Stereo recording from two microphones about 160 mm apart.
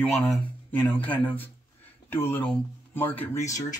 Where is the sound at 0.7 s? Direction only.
10° left (ahead or behind).